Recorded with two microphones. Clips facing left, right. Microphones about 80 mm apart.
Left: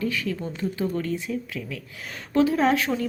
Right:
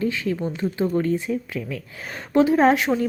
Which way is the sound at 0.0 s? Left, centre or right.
Right.